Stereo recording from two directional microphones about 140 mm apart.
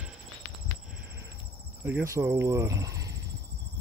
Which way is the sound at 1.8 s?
15° right (ahead or behind).